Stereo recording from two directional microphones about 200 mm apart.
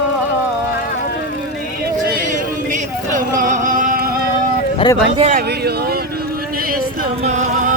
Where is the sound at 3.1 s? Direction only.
40° right (ahead or behind).